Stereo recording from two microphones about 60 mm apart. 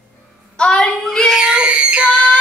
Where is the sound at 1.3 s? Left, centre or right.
Centre.